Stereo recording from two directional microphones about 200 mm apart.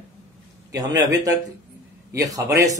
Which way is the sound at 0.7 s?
15° right (ahead or behind).